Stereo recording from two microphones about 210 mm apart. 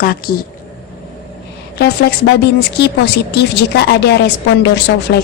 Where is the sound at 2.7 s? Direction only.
50° left (ahead or behind).